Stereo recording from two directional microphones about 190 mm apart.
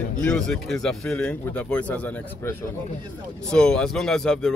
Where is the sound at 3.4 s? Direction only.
5° left (ahead or behind).